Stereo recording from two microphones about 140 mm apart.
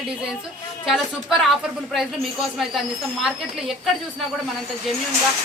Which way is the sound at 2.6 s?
Centre (ahead or behind).